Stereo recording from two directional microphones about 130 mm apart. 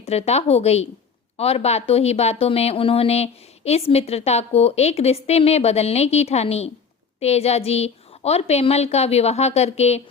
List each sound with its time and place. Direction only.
0.0 s a woman's voice: 55° left (ahead or behind)